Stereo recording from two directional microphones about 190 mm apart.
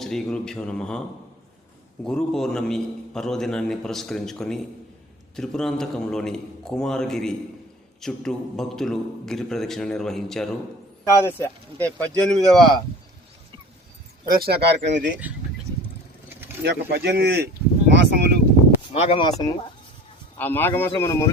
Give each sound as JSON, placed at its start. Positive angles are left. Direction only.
{"t": 0.0, "sound": "a man's voice", "side_deg": 0}
{"t": 2.0, "sound": "a man's voice", "side_deg": 5}
{"t": 11.0, "sound": "speech", "side_deg": 15}
{"t": 14.3, "sound": "speech", "side_deg": -50}
{"t": 16.6, "sound": "speech", "side_deg": -60}
{"t": 18.9, "sound": "speech", "side_deg": 30}
{"t": 20.4, "sound": "speech", "side_deg": 10}